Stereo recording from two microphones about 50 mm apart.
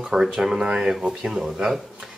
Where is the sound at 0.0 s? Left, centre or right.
Centre.